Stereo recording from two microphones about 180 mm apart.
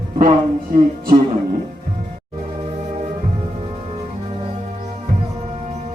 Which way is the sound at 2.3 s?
35° right (ahead or behind).